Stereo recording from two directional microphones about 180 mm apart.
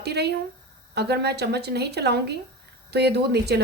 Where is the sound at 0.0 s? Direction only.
65° right (ahead or behind).